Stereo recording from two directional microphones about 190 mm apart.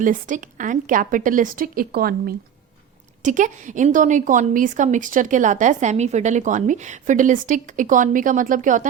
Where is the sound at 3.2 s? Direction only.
40° right (ahead or behind).